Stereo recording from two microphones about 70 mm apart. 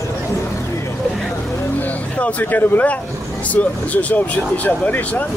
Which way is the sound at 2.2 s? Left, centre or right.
Left.